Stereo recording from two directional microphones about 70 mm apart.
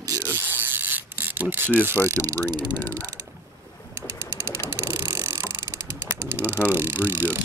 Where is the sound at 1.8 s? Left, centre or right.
Right.